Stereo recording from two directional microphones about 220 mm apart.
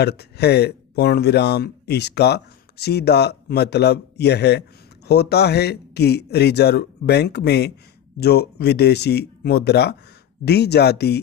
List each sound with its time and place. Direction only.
0.0 s speech: 50° left (ahead or behind)